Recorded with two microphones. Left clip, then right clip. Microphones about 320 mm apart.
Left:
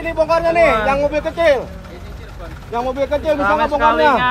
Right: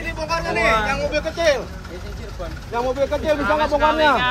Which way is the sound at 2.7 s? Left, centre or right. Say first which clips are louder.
Left 2 dB; left.